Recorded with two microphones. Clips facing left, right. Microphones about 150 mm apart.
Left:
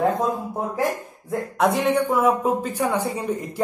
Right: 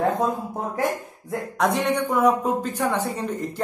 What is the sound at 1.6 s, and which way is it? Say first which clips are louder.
Speech: left 2 dB; centre (ahead or behind).